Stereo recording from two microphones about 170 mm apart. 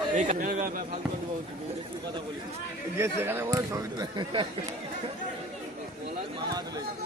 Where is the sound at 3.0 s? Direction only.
15° right (ahead or behind).